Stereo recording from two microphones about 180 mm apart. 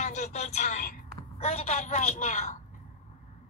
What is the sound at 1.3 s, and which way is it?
A woman's voice, 35° left (ahead or behind).